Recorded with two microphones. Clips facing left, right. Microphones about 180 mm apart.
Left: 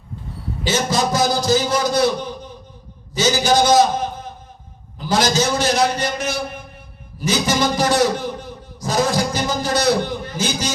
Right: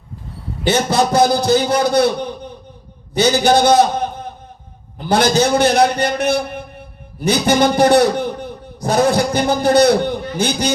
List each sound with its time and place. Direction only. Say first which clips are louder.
0.6 s a man's voice: right 4 dB; 60° right (ahead or behind)